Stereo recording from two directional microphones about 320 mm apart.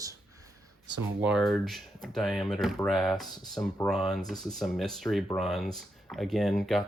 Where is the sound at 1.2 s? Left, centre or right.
Centre.